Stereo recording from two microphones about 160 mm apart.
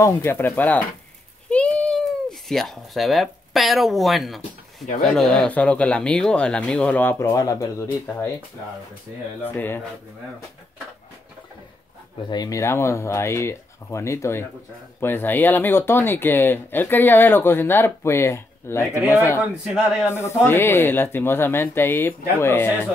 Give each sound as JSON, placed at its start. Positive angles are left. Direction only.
{"t": 0.0, "sound": "speech", "side_deg": 15}
{"t": 9.4, "sound": "speech", "side_deg": 10}
{"t": 12.3, "sound": "speech", "side_deg": 25}
{"t": 19.4, "sound": "a man's voice", "side_deg": -5}
{"t": 20.1, "sound": "speech", "side_deg": 15}